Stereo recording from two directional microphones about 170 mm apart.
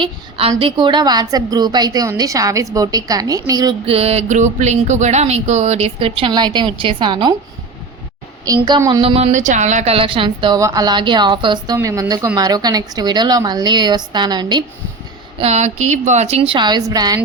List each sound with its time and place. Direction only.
0.0 s a woman's voice: 35° right (ahead or behind)
3.8 s speech: 35° right (ahead or behind)
8.4 s a woman's voice: 25° right (ahead or behind)
15.4 s speech: 40° right (ahead or behind); by 17.2 s 20° right (ahead or behind)